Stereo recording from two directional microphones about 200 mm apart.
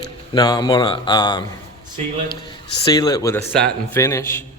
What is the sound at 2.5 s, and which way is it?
A man's voice, 15° left (ahead or behind).